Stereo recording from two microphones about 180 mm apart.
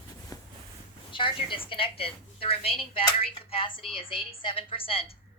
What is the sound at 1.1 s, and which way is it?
Speech, 25° left (ahead or behind).